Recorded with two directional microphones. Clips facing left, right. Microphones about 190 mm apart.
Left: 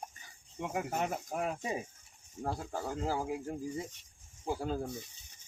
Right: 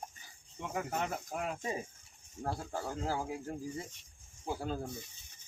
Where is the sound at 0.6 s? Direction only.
20° left (ahead or behind).